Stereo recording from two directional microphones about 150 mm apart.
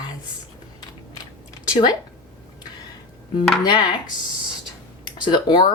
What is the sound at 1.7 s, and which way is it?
Speech, 30° left (ahead or behind).